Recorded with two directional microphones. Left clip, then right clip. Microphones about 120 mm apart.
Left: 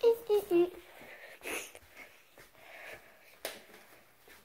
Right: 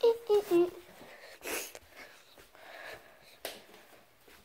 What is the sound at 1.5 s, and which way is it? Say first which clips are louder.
Dog: right 3 dB; 25° right (ahead or behind).